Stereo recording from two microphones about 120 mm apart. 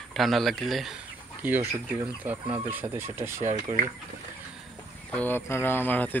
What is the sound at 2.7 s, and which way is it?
Speech, 20° right (ahead or behind).